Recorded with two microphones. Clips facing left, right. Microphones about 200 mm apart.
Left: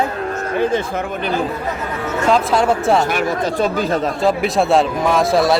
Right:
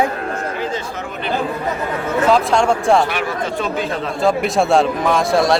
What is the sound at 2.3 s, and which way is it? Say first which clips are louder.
Speech: even; 5° left (ahead or behind).